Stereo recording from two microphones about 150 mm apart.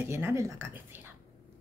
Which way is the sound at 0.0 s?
15° right (ahead or behind).